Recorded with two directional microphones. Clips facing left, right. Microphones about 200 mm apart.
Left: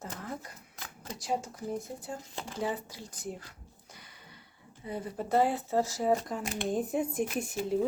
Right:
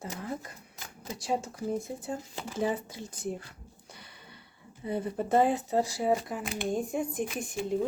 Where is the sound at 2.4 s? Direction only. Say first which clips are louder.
Right 3 dB; 5° right (ahead or behind).